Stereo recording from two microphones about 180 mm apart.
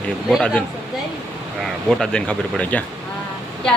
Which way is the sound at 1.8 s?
Centre (ahead or behind).